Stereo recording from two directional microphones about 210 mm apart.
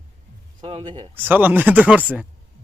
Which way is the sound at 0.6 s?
25° right (ahead or behind).